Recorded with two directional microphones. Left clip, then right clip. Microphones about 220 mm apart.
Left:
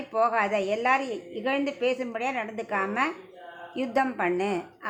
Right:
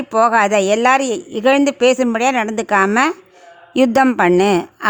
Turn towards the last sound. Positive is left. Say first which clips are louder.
# right 15 dB
turn(degrees=-50)  # may be behind; listen again after turning